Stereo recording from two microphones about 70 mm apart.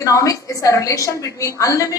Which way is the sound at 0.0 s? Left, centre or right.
Left.